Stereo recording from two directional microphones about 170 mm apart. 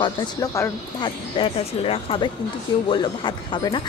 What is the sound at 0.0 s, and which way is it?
Speech, 25° left (ahead or behind).